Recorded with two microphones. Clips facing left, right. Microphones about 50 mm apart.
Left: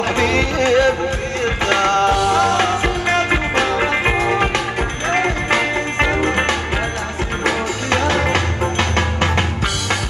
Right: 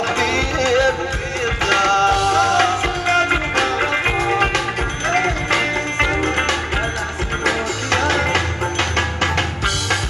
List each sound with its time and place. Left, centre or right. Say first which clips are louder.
0.2 s music: left 4 dB; centre
2.3 s music: even; centre